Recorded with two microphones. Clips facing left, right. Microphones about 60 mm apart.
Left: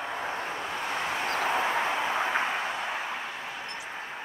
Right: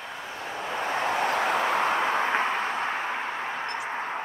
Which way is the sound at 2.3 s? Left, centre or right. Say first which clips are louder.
Right 3 dB; right.